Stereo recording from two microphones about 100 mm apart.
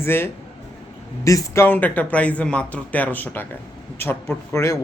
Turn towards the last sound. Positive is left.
turn(degrees=30)  # may be behind; listen again after turning